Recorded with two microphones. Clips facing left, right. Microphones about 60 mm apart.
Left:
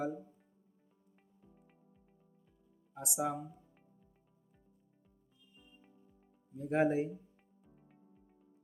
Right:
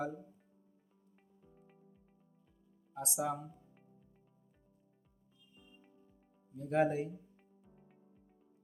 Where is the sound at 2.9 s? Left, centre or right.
Centre.